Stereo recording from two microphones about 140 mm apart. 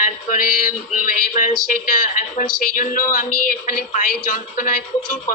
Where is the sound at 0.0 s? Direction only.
80° left.